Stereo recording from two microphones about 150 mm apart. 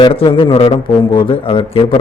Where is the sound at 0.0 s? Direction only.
35° left (ahead or behind).